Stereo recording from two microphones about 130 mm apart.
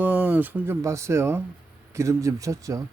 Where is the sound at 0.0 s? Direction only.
15° right (ahead or behind).